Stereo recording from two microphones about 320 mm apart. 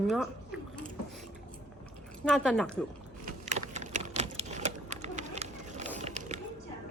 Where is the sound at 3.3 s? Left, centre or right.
Right.